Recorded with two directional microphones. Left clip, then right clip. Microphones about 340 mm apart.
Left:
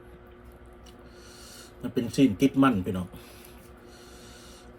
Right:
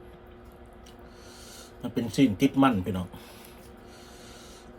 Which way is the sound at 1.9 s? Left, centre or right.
Centre.